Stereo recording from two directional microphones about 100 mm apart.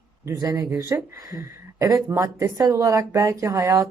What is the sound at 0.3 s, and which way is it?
Speech, 35° right (ahead or behind).